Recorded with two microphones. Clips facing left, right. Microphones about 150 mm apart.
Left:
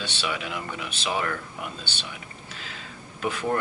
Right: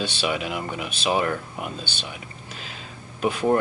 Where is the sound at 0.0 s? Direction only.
15° right (ahead or behind).